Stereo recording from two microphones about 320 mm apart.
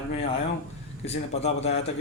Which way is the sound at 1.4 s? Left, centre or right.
Centre.